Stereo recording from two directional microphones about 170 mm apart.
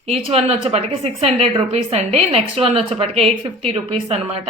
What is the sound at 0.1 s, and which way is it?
A woman's voice, 35° right (ahead or behind).